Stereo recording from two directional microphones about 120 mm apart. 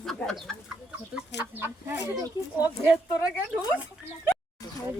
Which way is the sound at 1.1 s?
15° right (ahead or behind).